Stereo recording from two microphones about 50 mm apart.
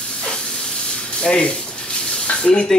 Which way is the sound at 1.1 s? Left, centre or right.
Centre.